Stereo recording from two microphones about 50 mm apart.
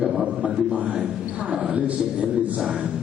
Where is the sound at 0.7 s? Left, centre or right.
Right.